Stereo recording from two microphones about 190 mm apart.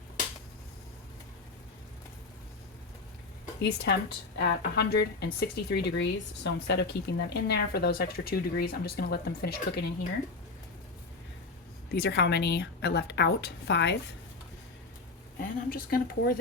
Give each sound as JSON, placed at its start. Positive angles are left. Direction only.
{"t": 3.6, "sound": "speech", "side_deg": 65}
{"t": 11.9, "sound": "speech", "side_deg": 60}
{"t": 15.4, "sound": "a woman's voice", "side_deg": 50}